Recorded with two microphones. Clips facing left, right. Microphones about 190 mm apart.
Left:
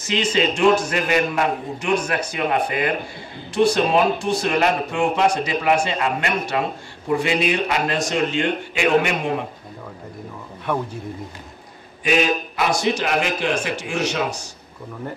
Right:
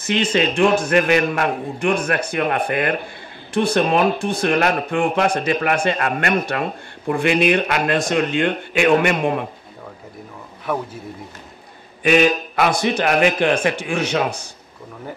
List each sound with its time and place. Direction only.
0.0 s speech: 55° right (ahead or behind)
12.0 s speech: 60° right (ahead or behind)